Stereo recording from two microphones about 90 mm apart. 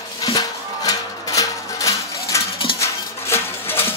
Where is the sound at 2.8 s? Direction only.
25° left (ahead or behind).